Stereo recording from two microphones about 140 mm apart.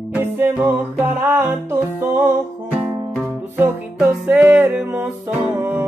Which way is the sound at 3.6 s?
10° right (ahead or behind).